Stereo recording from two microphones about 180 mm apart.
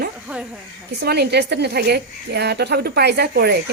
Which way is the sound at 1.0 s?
65° right (ahead or behind).